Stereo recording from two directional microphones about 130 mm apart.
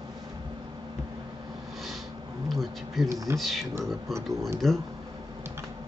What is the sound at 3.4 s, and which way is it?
Speech, centre (ahead or behind).